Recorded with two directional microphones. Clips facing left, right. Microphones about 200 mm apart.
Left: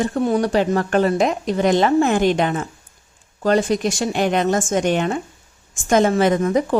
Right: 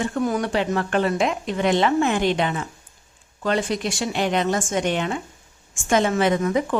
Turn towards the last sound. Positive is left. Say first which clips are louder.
# left 3 dB
turn(degrees=40)  # may be behind; listen again after turning